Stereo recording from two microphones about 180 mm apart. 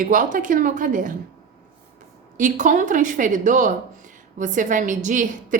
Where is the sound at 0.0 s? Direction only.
45° right (ahead or behind).